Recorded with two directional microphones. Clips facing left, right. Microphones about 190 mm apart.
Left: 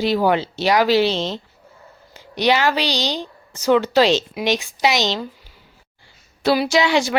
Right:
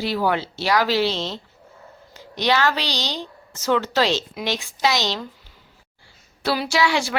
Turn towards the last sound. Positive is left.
turn(degrees=20)  # may be behind; listen again after turning